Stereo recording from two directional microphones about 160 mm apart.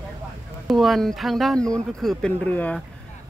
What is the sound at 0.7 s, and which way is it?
Speech, centre (ahead or behind).